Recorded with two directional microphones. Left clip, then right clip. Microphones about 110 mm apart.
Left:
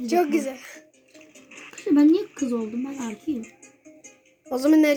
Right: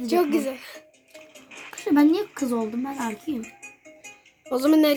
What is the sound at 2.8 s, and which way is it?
Speech, 20° right (ahead or behind).